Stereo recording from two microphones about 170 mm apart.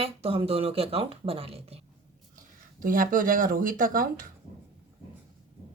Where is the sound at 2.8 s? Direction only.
55° right (ahead or behind).